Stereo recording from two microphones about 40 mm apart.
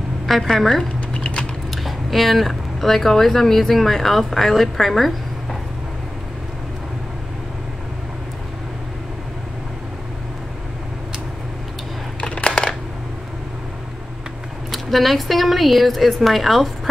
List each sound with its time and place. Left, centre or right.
0.3 s speech: centre
1.1 s typing: left
1.8 s speech: centre
12.2 s a sound: left
14.7 s speech: centre